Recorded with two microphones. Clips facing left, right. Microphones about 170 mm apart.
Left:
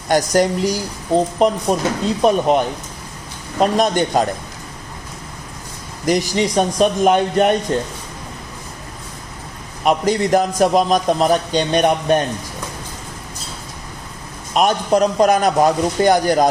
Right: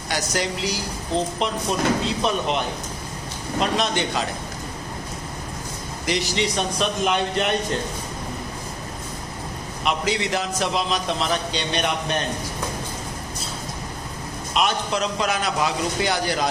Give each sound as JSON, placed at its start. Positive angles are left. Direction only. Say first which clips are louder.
{"t": 0.3, "sound": "a man's voice", "louder": "left 9 dB", "side_deg": 45}
{"t": 6.1, "sound": "a man's voice", "louder": "left 7 dB", "side_deg": 45}
{"t": 9.8, "sound": "a man's voice", "louder": "left 8 dB", "side_deg": 45}
{"t": 14.5, "sound": "a man's voice", "louder": "left 8 dB", "side_deg": 45}